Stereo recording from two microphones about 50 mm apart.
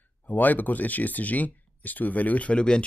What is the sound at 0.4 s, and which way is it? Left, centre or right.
Speech, left.